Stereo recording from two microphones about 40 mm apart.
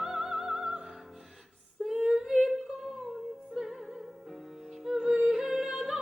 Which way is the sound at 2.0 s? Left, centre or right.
Centre.